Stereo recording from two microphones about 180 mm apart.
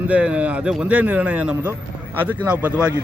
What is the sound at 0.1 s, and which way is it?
Speech, 5° right (ahead or behind).